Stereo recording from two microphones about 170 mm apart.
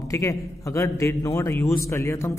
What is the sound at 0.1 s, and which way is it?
A man's voice, 20° left (ahead or behind).